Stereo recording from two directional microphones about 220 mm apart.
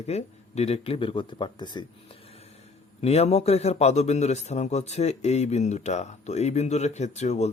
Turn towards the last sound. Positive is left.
turn(degrees=30)  # may be behind; listen again after turning